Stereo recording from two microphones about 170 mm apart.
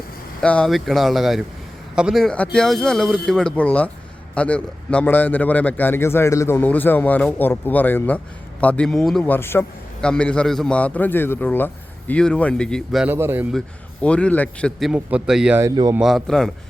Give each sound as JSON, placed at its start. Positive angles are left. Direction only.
{"t": 0.4, "sound": "a man's voice", "side_deg": 5}
{"t": 13.1, "sound": "speech", "side_deg": -10}
{"t": 14.0, "sound": "speech", "side_deg": 5}
{"t": 15.6, "sound": "speech", "side_deg": -20}
{"t": 16.0, "sound": "speech", "side_deg": 0}